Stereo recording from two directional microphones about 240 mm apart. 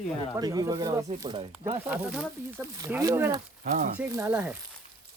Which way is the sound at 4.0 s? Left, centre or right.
Centre.